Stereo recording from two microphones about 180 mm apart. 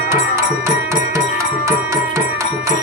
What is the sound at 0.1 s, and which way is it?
Music, 15° right (ahead or behind).